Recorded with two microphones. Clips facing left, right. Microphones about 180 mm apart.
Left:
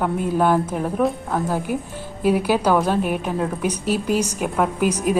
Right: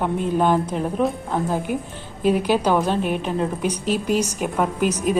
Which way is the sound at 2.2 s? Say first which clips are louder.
Even; 10° left (ahead or behind).